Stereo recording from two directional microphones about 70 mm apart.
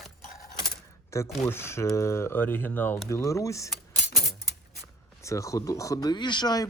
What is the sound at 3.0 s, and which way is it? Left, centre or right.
Speech, left.